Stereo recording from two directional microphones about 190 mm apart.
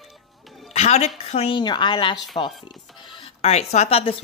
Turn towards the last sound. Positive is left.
turn(degrees=30)  # may be behind; listen again after turning